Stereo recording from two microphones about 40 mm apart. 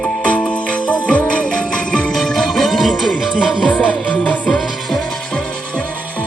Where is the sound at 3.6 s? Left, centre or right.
Left.